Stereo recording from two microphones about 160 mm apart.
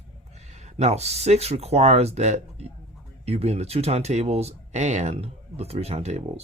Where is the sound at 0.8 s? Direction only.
45° right (ahead or behind).